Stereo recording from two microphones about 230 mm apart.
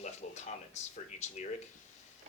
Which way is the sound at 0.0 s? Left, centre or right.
Left.